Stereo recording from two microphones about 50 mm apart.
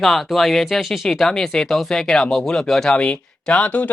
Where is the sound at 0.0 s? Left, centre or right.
Centre.